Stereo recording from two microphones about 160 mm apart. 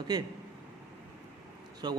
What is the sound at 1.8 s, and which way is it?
Speech, 25° right (ahead or behind).